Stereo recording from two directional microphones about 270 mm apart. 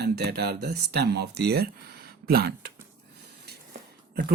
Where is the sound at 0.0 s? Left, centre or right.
Right.